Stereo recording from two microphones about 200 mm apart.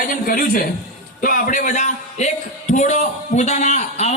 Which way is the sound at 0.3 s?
45° left (ahead or behind).